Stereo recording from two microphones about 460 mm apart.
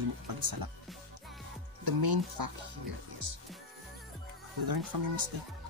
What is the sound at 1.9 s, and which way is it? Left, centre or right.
Speech, right.